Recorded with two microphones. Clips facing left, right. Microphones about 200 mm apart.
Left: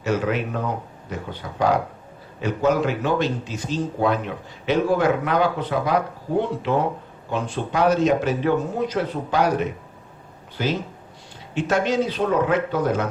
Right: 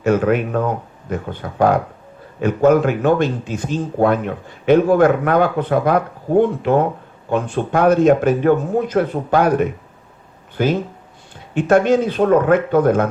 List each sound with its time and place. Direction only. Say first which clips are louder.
0.0 s a man's voice: right 7 dB; 50° right (ahead or behind)